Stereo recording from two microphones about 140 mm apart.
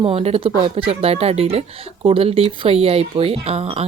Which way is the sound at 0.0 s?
45° right (ahead or behind).